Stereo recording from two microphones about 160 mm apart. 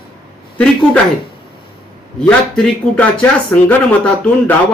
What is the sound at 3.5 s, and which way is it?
Speech, 15° left (ahead or behind).